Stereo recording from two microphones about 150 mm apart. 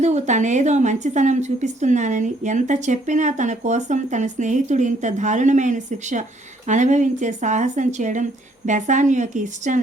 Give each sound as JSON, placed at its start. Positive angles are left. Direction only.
{"t": 0.0, "sound": "speech", "side_deg": -50}